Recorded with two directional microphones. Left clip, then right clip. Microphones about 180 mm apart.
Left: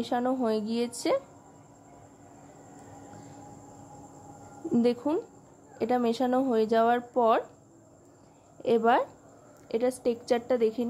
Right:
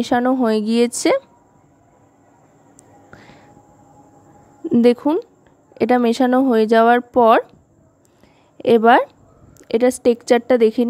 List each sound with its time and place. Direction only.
0.0 s speech: 45° right (ahead or behind)
4.6 s a sound: 30° right (ahead or behind)
5.1 s speech: 30° right (ahead or behind)
5.8 s speech: 45° right (ahead or behind)
8.5 s a woman's voice: 45° right (ahead or behind)